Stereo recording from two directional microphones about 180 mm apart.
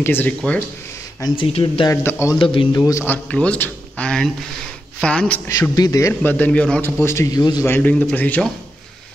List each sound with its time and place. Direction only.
0.0 s a man's voice: 10° left (ahead or behind)
1.2 s speech: 30° left (ahead or behind)
2.0 s a man's voice: 15° left (ahead or behind)
2.3 s speech: 30° left (ahead or behind)
3.1 s a man's voice: 5° left (ahead or behind)
5.6 s a man's voice: 20° left (ahead or behind)
7.7 s a man's voice: 10° left (ahead or behind)